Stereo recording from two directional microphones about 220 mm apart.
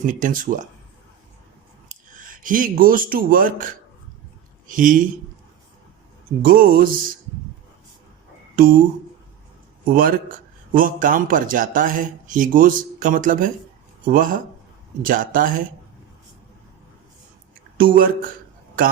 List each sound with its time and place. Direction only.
0.0 s a man's voice: 35° right (ahead or behind)
1.9 s a man's voice: 40° right (ahead or behind)
6.5 s a man's voice: 40° right (ahead or behind)
8.5 s speech: 40° right (ahead or behind)
9.9 s a man's voice: 40° right (ahead or behind)
17.7 s a man's voice: 40° right (ahead or behind)